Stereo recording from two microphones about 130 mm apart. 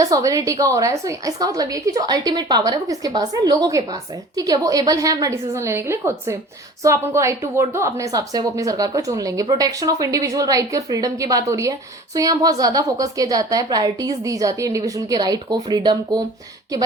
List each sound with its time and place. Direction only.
0.0 s a woman's voice: 25° right (ahead or behind)